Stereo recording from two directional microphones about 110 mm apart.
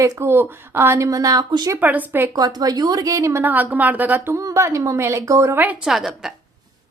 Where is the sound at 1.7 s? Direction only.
15° right (ahead or behind).